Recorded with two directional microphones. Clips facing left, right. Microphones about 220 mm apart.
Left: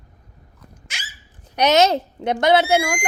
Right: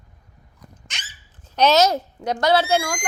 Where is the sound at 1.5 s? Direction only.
20° left (ahead or behind).